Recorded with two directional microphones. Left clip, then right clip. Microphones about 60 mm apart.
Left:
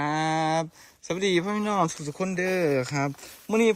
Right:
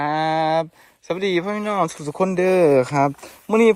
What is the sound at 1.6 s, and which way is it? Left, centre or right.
Speech, left.